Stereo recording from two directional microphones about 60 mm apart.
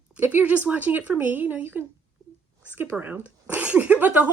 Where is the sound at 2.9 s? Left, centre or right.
Centre; by 4.3 s right.